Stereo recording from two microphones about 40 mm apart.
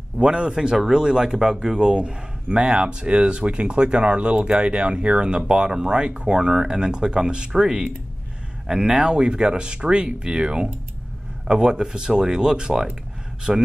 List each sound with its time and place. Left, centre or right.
0.2 s speech: right
0.7 s speech: centre